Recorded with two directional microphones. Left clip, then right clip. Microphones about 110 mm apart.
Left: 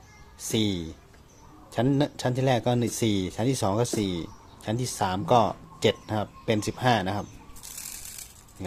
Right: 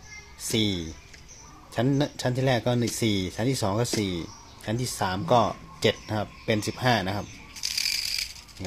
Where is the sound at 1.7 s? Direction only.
30° left (ahead or behind).